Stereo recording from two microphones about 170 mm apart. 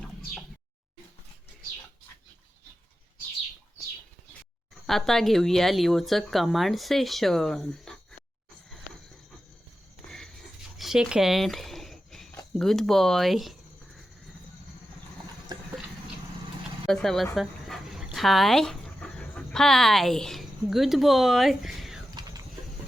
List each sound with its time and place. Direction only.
4.9 s speech: centre (ahead or behind)
10.8 s a sound: 5° right (ahead or behind)
12.5 s speech: 5° left (ahead or behind)
16.8 s speech: centre (ahead or behind)
17.3 s dog: centre (ahead or behind)
22.1 s a sound: 20° right (ahead or behind)